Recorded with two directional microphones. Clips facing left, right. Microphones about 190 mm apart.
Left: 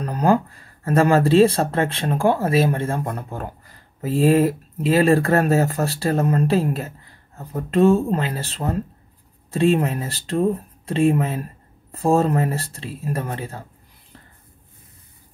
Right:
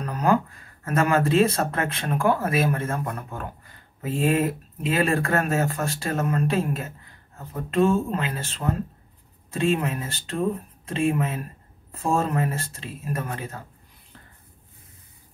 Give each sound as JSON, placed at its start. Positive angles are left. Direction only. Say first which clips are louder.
{"t": 0.0, "sound": "speech", "louder": "left 3 dB", "side_deg": 35}